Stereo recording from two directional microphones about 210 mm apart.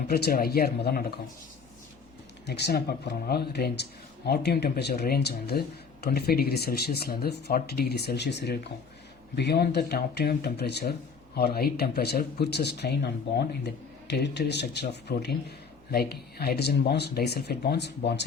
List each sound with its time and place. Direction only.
0.1 s speech: 45° left (ahead or behind)
2.5 s speech: 50° left (ahead or behind)